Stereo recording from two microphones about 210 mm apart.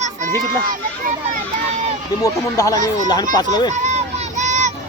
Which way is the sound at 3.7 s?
35° right (ahead or behind).